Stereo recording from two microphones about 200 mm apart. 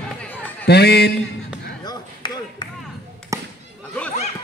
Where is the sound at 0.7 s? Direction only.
55° left (ahead or behind).